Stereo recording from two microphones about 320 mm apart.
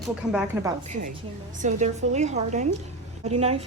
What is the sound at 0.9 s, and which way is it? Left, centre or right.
Speech, right.